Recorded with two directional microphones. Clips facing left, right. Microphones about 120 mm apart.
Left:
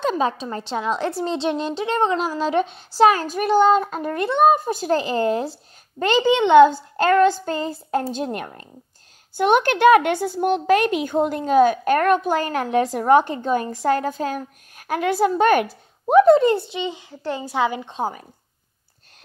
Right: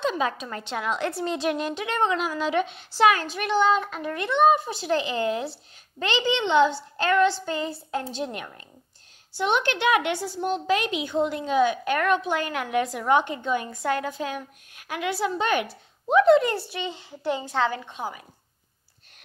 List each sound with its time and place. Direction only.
0.0 s a sound: 40° left (ahead or behind)
0.3 s a woman's voice: 30° left (ahead or behind)
16.5 s a child's voice: 20° left (ahead or behind)
17.1 s a child's voice: 15° right (ahead or behind)
17.4 s a woman's voice: 15° left (ahead or behind)